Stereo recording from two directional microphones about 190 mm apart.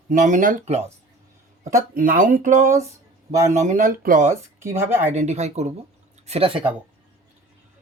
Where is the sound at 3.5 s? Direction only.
40° right (ahead or behind).